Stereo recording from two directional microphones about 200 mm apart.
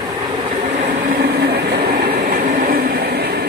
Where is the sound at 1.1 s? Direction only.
50° right (ahead or behind).